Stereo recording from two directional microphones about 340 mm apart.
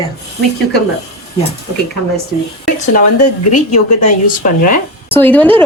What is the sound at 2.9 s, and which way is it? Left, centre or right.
Speech, left.